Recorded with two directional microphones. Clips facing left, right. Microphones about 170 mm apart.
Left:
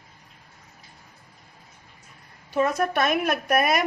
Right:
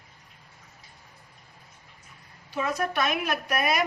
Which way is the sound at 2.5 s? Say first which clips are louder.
Left 5 dB; 50° left (ahead or behind).